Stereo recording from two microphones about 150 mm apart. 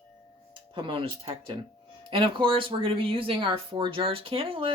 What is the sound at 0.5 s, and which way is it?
Speech, 35° right (ahead or behind).